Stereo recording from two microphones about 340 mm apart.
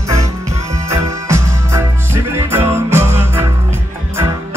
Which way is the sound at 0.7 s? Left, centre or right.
Centre.